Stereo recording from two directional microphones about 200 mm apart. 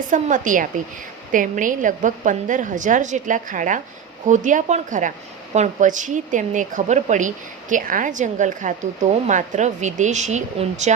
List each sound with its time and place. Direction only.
0.1 s a woman's voice: 40° right (ahead or behind)